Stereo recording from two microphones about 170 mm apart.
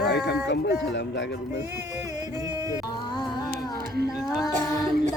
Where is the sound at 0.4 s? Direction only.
75° left (ahead or behind); by 1.4 s 90° left.